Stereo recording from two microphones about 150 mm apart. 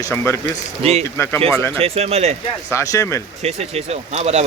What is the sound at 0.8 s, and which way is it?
Speech, 45° right (ahead or behind).